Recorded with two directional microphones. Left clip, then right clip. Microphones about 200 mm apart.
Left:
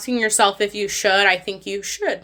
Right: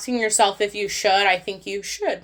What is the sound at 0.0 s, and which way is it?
Speech, 15° left (ahead or behind).